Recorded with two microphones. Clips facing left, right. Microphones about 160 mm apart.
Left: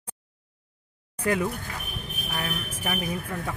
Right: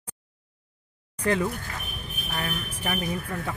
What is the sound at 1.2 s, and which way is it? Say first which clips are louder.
Speech: right 1 dB; 10° left (ahead or behind).